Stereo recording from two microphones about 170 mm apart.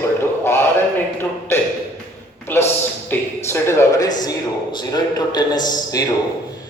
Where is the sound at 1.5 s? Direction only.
15° left (ahead or behind).